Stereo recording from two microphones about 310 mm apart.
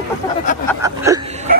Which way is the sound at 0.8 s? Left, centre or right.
Centre.